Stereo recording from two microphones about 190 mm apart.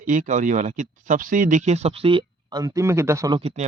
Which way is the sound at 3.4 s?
35° right (ahead or behind).